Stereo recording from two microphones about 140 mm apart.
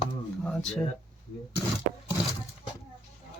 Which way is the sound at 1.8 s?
90° right.